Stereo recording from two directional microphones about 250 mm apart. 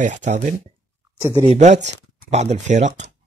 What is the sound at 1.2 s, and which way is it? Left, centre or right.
Speech, centre.